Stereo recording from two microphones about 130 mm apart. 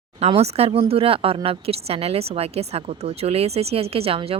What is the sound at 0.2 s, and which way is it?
Speech, 55° right (ahead or behind).